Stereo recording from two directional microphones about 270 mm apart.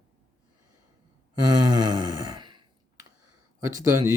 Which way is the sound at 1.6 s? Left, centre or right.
Right.